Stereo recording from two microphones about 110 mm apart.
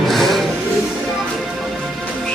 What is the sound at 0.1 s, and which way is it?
Music, centre (ahead or behind).